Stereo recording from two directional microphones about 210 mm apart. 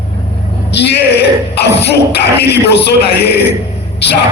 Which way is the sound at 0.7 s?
55° left (ahead or behind).